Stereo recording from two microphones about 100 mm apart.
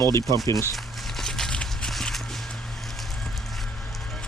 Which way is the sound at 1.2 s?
5° left (ahead or behind).